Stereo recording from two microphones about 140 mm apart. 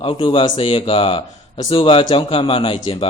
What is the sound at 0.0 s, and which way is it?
Speech, 40° left (ahead or behind).